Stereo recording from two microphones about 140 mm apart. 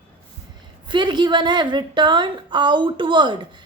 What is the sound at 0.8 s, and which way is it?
A woman's voice, 35° right (ahead or behind).